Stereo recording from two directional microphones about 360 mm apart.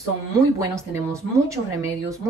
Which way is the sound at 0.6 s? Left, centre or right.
Centre.